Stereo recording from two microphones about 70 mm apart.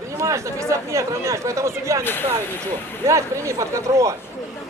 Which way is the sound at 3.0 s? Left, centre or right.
Right.